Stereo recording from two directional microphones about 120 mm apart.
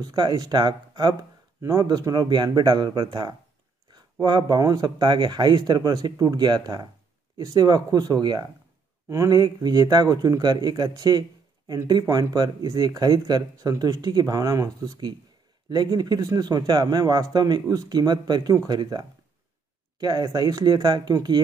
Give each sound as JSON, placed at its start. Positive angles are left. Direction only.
{"t": 0.0, "sound": "speech", "side_deg": -40}